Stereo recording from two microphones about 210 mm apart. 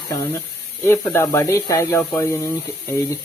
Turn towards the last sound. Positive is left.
turn(degrees=10)  # may be behind; listen again after turning